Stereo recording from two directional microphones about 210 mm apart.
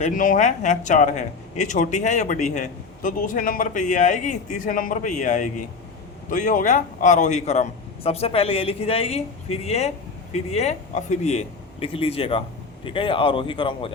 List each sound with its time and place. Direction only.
0.0 s speech: 40° left (ahead or behind); by 13.9 s 25° left (ahead or behind)